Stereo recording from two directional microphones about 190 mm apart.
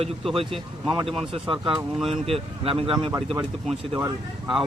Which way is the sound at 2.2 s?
30° right (ahead or behind).